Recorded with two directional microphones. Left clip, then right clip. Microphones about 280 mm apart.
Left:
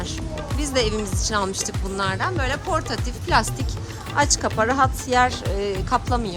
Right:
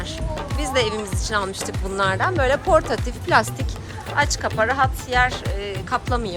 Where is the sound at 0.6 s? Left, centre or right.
Centre.